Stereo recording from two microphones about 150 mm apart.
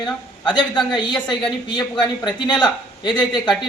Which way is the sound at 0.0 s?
30° left (ahead or behind).